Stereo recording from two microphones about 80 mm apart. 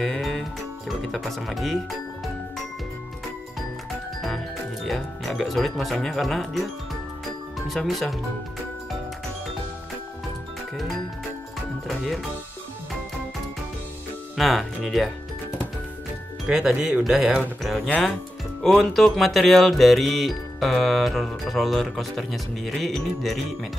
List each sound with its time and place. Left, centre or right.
0.0 s speech: centre
4.8 s music: centre
7.5 s speech: centre
11.9 s music: centre
14.3 s music: centre
16.4 s speech: centre
17.6 s music: centre